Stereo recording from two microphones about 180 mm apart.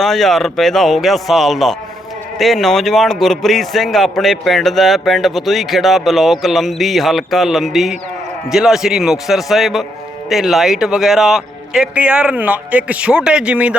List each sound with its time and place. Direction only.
0.0 s a man's voice: centre (ahead or behind)